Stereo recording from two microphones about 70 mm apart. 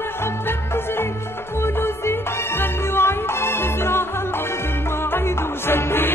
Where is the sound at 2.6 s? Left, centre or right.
Left.